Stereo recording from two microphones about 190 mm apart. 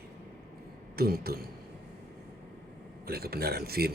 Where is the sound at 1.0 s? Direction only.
55° right (ahead or behind).